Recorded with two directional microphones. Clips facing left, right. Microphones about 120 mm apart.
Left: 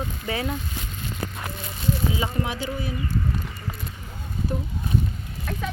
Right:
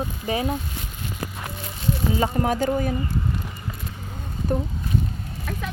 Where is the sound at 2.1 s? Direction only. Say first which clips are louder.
Right 5 dB; 45° right (ahead or behind).